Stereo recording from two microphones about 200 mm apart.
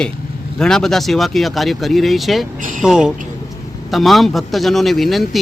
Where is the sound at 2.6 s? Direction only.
40° right (ahead or behind).